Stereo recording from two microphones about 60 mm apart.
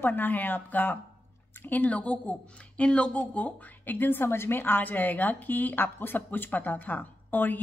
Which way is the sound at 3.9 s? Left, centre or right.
Left.